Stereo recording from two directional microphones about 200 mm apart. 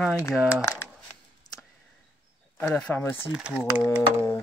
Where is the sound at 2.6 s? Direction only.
5° left (ahead or behind).